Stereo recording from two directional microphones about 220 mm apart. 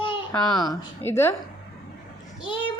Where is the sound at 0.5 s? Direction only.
15° left (ahead or behind).